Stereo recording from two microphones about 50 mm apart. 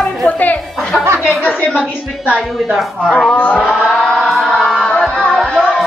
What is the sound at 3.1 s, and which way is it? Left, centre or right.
Speech, left.